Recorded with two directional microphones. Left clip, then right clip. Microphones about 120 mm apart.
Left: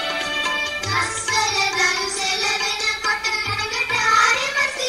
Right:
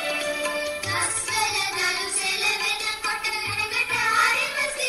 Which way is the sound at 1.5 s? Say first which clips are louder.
Left 5 dB; 45° left (ahead or behind).